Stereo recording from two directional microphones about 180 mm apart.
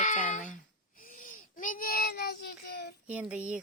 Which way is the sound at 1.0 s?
50° left (ahead or behind).